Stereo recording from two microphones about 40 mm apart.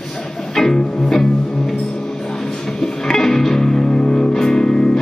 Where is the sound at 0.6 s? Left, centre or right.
Centre.